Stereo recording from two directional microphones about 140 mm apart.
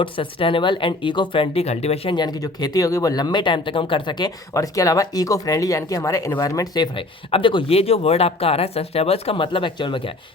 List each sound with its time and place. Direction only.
0.0 s speech: 40° left (ahead or behind)
2.1 s speech: 30° left (ahead or behind)
6.9 s speech: 40° left (ahead or behind)